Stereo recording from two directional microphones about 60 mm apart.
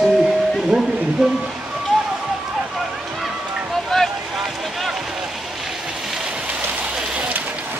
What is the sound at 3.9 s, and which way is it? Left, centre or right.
Boat, centre.